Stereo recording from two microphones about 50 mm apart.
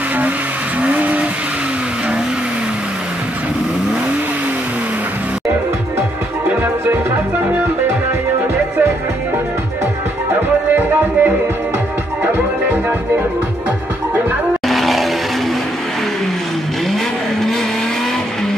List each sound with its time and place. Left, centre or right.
0.8 s vehicle: right
10.8 s music: right
14.7 s vehicle: centre